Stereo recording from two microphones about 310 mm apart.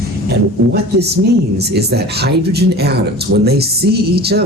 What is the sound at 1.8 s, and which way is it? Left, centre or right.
Speech, right.